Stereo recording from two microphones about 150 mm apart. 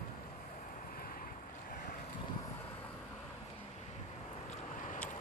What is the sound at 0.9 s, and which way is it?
Boat, 70° left (ahead or behind).